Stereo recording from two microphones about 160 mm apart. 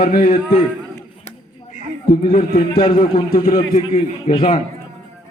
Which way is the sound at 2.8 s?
35° left (ahead or behind).